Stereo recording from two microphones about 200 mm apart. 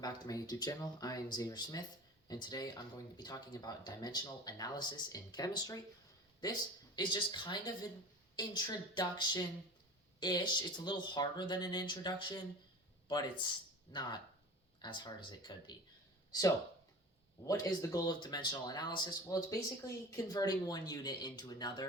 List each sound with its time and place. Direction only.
0.0 s speech: 20° left (ahead or behind)
17.4 s speech: 15° left (ahead or behind)